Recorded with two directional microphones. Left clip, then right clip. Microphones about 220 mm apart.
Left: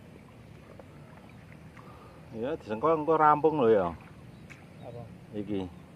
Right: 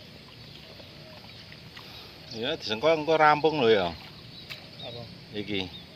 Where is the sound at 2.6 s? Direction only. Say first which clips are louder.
Right 2 dB; 15° right (ahead or behind).